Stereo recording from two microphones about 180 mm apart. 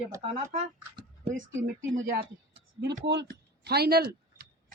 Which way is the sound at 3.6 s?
60° right (ahead or behind).